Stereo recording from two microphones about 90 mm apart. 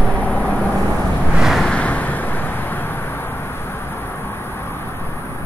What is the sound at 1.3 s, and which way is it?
Vehicle, 5° right (ahead or behind).